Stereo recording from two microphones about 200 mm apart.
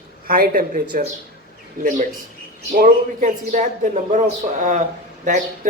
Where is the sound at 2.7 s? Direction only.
45° right (ahead or behind).